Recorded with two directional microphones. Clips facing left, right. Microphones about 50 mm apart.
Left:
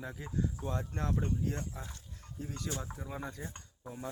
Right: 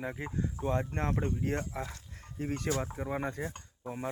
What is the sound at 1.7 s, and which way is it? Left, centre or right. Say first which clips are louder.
Speech: right 8 dB; right.